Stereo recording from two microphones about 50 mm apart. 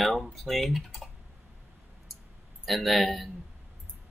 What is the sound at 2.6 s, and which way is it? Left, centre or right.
Speech, centre.